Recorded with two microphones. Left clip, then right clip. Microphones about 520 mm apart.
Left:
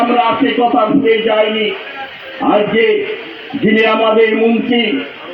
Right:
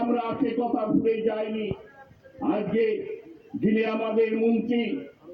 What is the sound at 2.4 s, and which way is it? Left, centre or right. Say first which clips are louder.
A man's voice: left 14 dB; centre.